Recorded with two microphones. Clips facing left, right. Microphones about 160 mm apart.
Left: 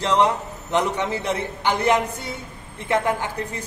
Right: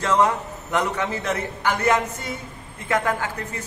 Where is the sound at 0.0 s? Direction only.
20° left (ahead or behind).